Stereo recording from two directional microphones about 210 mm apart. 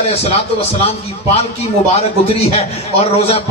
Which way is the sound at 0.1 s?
30° left (ahead or behind).